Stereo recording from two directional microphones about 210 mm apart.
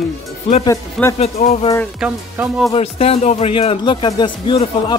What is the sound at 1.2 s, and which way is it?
Speech, 30° left (ahead or behind).